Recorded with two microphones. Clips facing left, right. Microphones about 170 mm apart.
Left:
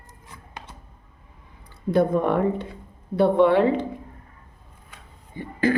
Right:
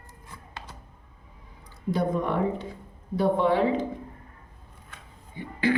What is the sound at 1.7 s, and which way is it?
Speech, 55° left (ahead or behind).